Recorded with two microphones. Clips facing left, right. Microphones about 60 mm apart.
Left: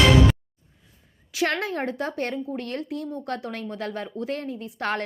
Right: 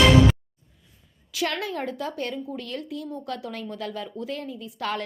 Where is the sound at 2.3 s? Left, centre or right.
Left.